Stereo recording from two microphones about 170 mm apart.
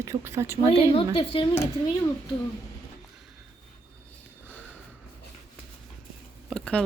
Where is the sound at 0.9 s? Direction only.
30° left (ahead or behind).